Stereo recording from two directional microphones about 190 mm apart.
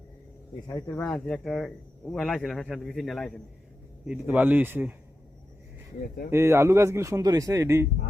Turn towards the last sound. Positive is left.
turn(degrees=-15)  # may be behind; listen again after turning